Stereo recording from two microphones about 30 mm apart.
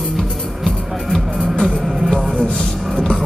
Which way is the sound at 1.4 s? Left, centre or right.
Centre.